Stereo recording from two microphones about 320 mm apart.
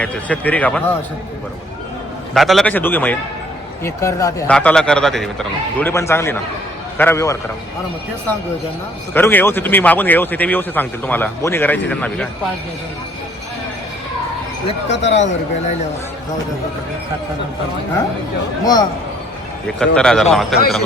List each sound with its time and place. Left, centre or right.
0.0 s speech: centre
2.3 s a man's voice: centre
9.1 s speech: centre
14.8 s speech: left
18.6 s a man's voice: centre